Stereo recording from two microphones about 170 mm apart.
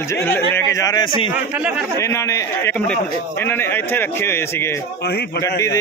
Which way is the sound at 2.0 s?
15° left (ahead or behind).